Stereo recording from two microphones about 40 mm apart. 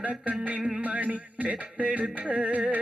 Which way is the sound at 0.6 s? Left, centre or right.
Centre.